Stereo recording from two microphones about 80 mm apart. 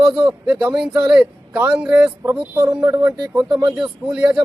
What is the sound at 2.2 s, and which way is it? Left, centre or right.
Speech, right.